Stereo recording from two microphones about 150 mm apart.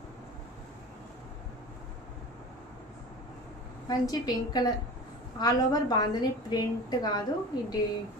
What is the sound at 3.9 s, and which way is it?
A woman's voice, 25° left (ahead or behind).